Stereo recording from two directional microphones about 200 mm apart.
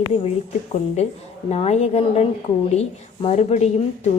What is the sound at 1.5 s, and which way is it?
A woman's voice, 30° left (ahead or behind).